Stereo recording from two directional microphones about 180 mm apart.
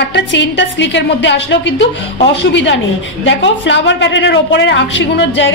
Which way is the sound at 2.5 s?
90° left.